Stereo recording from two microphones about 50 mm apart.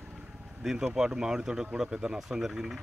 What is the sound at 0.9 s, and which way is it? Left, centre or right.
Speech, centre.